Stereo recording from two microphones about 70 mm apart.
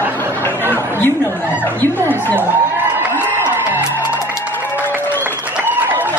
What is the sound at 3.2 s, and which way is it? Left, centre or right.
Music, right.